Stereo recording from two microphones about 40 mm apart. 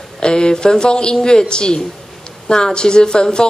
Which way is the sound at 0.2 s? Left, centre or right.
Left.